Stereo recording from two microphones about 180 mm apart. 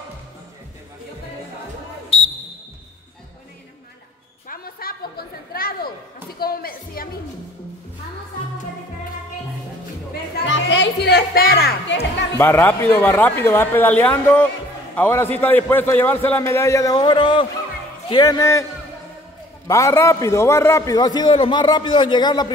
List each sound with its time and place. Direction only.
4.5 s a sound: 55° left (ahead or behind)
10.4 s music: 85° left; by 12.3 s 70° left (ahead or behind)
12.4 s a man's voice: 10° left (ahead or behind)
19.7 s a man's voice: 15° left (ahead or behind)